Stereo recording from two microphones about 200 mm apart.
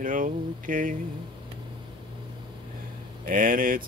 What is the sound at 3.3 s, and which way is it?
Mantra, 45° right (ahead or behind).